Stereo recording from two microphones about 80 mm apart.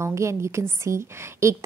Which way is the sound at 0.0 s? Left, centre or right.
Right.